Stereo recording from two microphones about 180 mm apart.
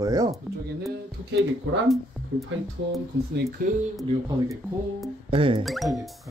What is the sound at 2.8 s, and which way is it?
Speech, 70° right (ahead or behind).